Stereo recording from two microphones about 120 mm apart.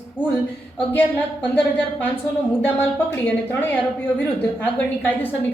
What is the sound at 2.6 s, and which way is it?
A woman's voice, 15° left (ahead or behind).